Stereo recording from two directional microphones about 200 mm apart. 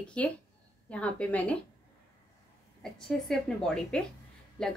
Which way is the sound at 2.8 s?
Centre (ahead or behind).